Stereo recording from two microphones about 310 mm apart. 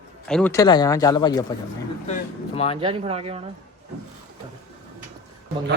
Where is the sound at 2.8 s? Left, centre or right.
Centre.